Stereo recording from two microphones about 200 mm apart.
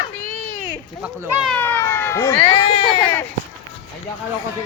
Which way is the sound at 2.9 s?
10° left (ahead or behind).